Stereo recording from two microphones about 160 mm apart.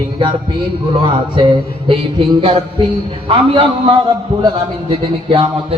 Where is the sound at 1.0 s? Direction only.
30° right (ahead or behind).